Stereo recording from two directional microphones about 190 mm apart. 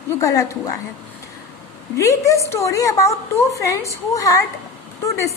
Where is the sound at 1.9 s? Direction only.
15° left (ahead or behind).